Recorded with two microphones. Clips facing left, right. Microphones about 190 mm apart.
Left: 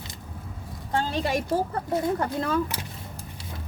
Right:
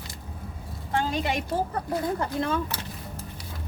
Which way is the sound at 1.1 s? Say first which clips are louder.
Left 2 dB; 40° left (ahead or behind).